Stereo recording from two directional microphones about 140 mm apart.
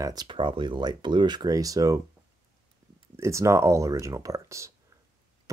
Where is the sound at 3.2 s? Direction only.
20° right (ahead or behind).